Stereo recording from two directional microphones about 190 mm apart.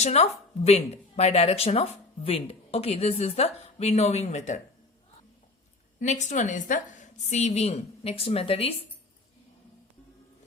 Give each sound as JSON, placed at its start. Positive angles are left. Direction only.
{"t": 0.0, "sound": "speech", "side_deg": 35}
{"t": 6.0, "sound": "speech", "side_deg": 40}